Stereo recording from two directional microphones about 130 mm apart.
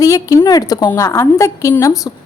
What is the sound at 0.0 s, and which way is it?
A woman's voice, 25° left (ahead or behind).